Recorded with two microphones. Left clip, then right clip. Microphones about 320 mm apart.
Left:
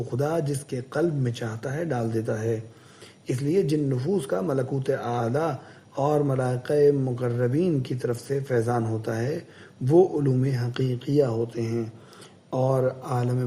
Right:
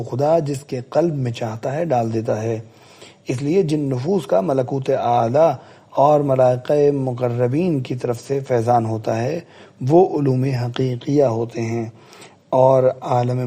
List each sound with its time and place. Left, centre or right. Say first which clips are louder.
0.1 s speech: right 10 dB; centre